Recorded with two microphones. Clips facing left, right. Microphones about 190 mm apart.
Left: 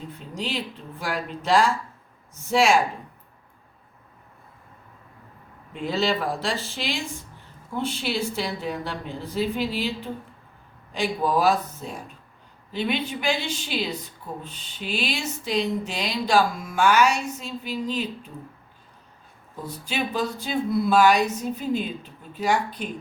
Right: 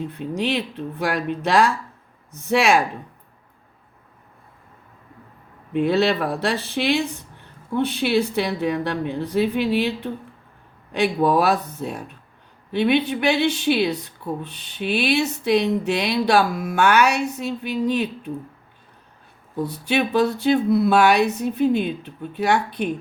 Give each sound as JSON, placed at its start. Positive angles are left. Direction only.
{"t": 0.1, "sound": "speech", "side_deg": -65}
{"t": 5.7, "sound": "speech", "side_deg": -65}
{"t": 19.6, "sound": "speech", "side_deg": -65}